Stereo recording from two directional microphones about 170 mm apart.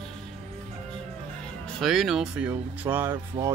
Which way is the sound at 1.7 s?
Centre (ahead or behind).